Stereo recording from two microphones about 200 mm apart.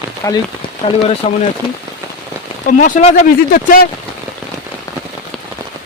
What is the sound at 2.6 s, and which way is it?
Speech, 40° left (ahead or behind).